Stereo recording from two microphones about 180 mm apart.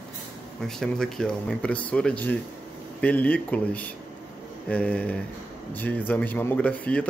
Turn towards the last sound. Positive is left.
turn(degrees=10)  # may be behind; listen again after turning